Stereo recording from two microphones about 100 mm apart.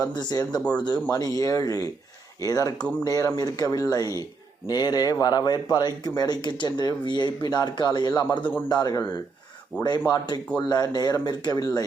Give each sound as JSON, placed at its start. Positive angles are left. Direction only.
{"t": 0.0, "sound": "speech", "side_deg": 45}
{"t": 0.6, "sound": "speech", "side_deg": 10}
{"t": 1.4, "sound": "speech", "side_deg": 35}
{"t": 2.7, "sound": "speech", "side_deg": 10}
{"t": 3.0, "sound": "speech", "side_deg": 35}
{"t": 9.7, "sound": "speech", "side_deg": -15}
{"t": 10.1, "sound": "speech", "side_deg": 45}